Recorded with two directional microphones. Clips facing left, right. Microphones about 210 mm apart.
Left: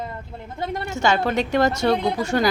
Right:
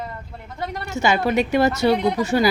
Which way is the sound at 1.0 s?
10° right (ahead or behind).